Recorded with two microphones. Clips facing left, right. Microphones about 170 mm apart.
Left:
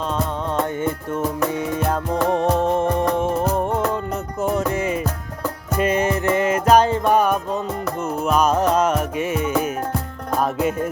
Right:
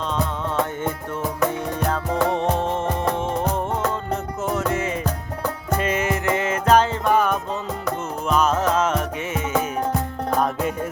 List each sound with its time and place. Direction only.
2.3 s music: 50° left (ahead or behind)
2.6 s music: 10° left (ahead or behind)
4.5 s music: 15° left (ahead or behind)
5.9 s music: 35° left (ahead or behind)
6.7 s music: 15° left (ahead or behind)